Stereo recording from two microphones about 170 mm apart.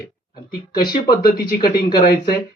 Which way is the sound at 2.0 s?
70° left (ahead or behind).